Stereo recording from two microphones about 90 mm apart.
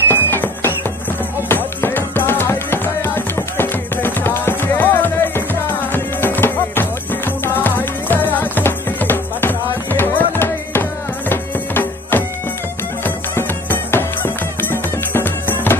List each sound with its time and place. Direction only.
0.1 s music: 25° left (ahead or behind)